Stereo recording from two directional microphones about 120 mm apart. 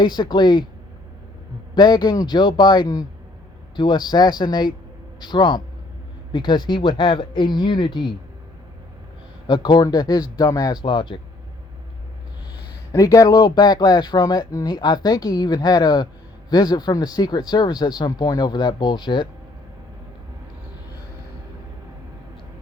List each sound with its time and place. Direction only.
0.0 s speech: 35° left (ahead or behind)
1.7 s speech: 35° left (ahead or behind)
9.5 s speech: 35° left (ahead or behind)
10.8 s speech: 45° left (ahead or behind)
12.9 s speech: 30° left (ahead or behind)